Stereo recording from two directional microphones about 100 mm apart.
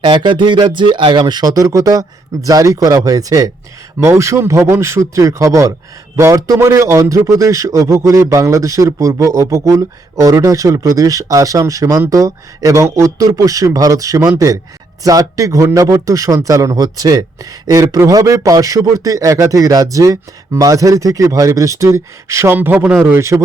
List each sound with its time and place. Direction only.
0.0 s a man's voice: 50° right (ahead or behind); by 22.5 s 30° right (ahead or behind)
22.5 s speech: 15° right (ahead or behind)
23.1 s speech: 30° right (ahead or behind)